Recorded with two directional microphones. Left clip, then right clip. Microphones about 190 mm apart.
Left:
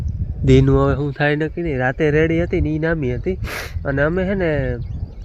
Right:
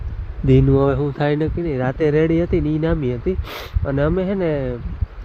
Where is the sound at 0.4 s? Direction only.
Centre (ahead or behind).